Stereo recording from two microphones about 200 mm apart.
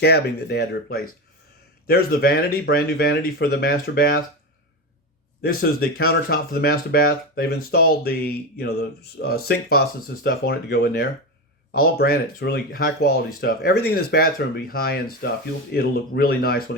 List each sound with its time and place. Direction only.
0.0 s speech: 55° left (ahead or behind)
5.4 s speech: 50° left (ahead or behind)